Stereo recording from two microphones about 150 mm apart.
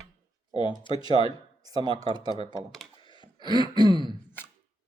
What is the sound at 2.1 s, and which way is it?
Throat clearing, 30° right (ahead or behind).